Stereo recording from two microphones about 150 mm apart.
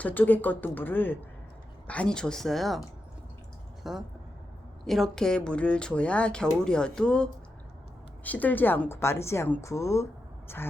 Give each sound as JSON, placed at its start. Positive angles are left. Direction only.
{"t": 0.0, "sound": "a woman's voice", "side_deg": 10}
{"t": 3.9, "sound": "a woman's voice", "side_deg": 0}